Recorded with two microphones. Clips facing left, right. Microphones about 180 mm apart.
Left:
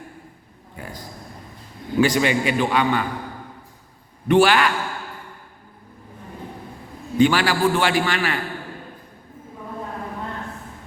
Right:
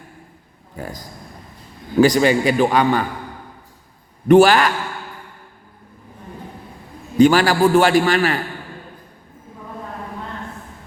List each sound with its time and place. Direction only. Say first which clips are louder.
0.8 s a man's voice: right 4 dB; 40° right (ahead or behind)
4.3 s a man's voice: right 5 dB; 45° right (ahead or behind)
7.2 s a man's voice: right 5 dB; 40° right (ahead or behind)